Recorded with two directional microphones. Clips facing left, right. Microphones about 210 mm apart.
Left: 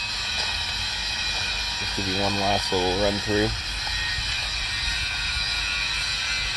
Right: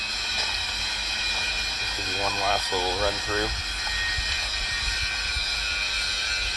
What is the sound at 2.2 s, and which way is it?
Speech, 15° left (ahead or behind).